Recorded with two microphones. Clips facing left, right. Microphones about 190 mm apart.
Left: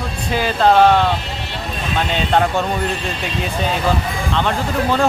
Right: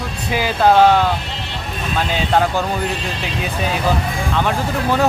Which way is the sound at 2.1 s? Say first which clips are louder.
Even; centre (ahead or behind).